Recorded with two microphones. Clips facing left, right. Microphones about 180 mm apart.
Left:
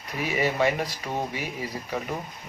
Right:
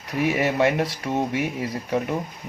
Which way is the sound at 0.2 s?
70° right (ahead or behind).